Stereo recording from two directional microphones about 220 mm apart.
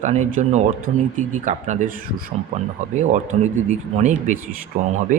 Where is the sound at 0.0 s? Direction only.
35° right (ahead or behind).